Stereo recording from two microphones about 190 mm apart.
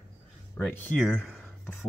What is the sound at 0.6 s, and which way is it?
Speech, 5° left (ahead or behind).